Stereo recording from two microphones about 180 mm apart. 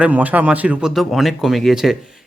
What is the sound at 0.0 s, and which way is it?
Speech, 10° right (ahead or behind).